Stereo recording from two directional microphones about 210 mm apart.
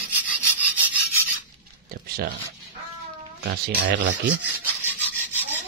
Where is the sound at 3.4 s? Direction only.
55° right (ahead or behind).